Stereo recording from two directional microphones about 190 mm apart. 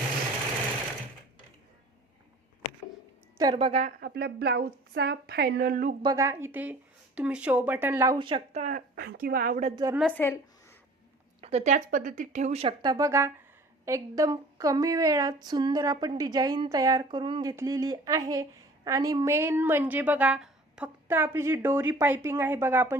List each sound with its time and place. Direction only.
3.3 s a woman's voice: 25° right (ahead or behind)
4.0 s a woman's voice: 55° right (ahead or behind)
6.0 s a woman's voice: 20° right (ahead or behind)
8.6 s speech: 50° right (ahead or behind)
9.6 s a woman's voice: 25° right (ahead or behind)
10.1 s speech: 10° left (ahead or behind)
11.3 s a woman's voice: 35° right (ahead or behind); by 23.0 s 10° right (ahead or behind)